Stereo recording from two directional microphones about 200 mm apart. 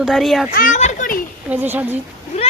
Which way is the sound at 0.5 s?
40° left (ahead or behind).